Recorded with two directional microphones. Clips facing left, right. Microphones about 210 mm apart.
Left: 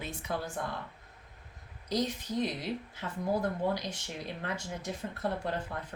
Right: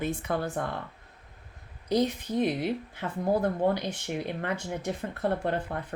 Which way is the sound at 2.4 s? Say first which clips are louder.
Right 7 dB; 60° right (ahead or behind).